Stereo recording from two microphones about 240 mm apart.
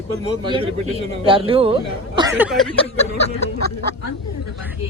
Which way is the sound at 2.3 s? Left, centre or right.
Centre.